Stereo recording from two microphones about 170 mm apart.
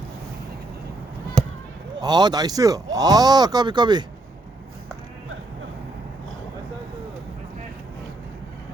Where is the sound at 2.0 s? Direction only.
25° right (ahead or behind).